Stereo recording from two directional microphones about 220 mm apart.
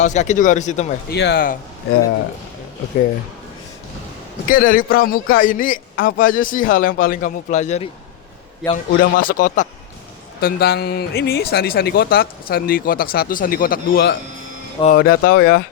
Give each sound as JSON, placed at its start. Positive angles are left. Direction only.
{"t": 0.0, "sound": "a man's voice", "side_deg": 35}
{"t": 1.1, "sound": "speech", "side_deg": 50}
{"t": 4.4, "sound": "a man's voice", "side_deg": 40}